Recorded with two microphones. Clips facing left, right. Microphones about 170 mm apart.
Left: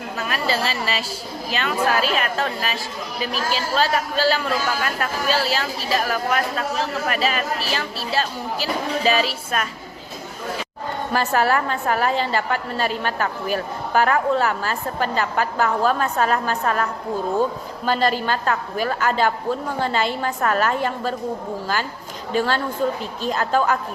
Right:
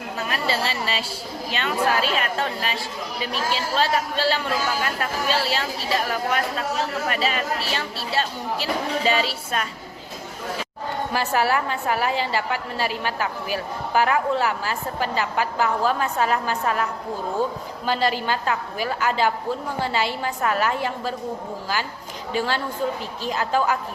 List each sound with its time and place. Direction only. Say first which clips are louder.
0.2 s speech: left 2 dB; 25° right (ahead or behind)
11.1 s a woman's voice: left 3 dB; 10° right (ahead or behind)
17.8 s a woman's voice: left 2 dB; 15° right (ahead or behind)
22.3 s a woman's voice: left 3 dB; 15° right (ahead or behind)